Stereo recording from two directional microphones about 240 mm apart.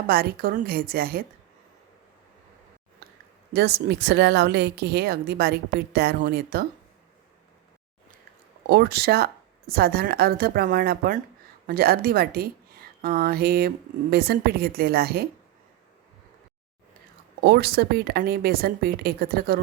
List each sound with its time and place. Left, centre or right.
0.1 s a woman's voice: right
3.5 s speech: right
8.6 s a woman's voice: right
17.4 s a woman's voice: right